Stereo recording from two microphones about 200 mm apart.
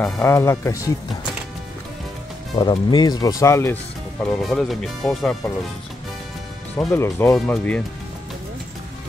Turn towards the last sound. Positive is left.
turn(degrees=5)  # may be behind; listen again after turning